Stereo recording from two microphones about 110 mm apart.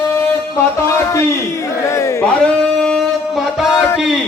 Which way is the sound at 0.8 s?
25° left (ahead or behind).